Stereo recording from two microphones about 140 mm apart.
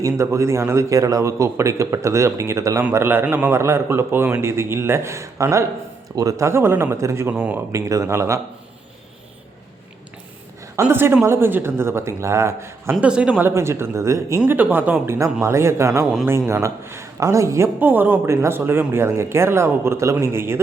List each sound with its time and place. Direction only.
0.0 s a man's voice: 20° right (ahead or behind)
7.7 s speech: 20° right (ahead or behind)
10.8 s a man's voice: 20° right (ahead or behind)